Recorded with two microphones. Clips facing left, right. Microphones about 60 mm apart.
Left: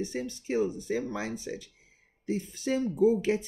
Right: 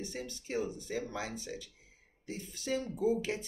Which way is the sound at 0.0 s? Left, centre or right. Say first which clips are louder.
Left 8 dB; left.